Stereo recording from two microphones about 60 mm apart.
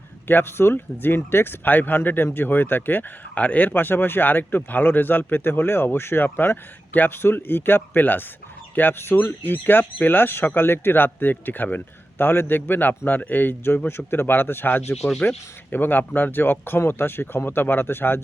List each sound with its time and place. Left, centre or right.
0.3 s speech: left